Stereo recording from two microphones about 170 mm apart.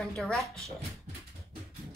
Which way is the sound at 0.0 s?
Centre (ahead or behind).